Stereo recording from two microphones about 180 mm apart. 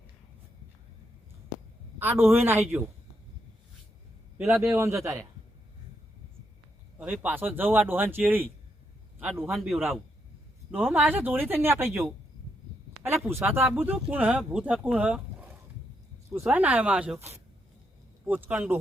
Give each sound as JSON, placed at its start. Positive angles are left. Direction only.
{"t": 2.0, "sound": "speech", "side_deg": -10}
{"t": 4.6, "sound": "speech", "side_deg": -15}
{"t": 7.0, "sound": "speech", "side_deg": -10}
{"t": 9.5, "sound": "a man's voice", "side_deg": 0}
{"t": 13.2, "sound": "speech", "side_deg": -15}